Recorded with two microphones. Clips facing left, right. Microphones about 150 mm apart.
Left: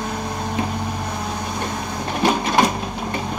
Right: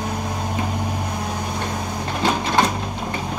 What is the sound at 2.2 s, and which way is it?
Printer, 15° left (ahead or behind).